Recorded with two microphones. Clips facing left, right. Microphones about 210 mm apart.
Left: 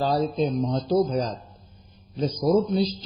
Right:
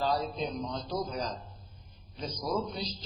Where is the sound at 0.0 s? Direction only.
35° left (ahead or behind).